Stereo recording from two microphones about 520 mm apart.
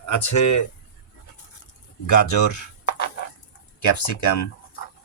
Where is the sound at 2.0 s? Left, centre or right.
Left.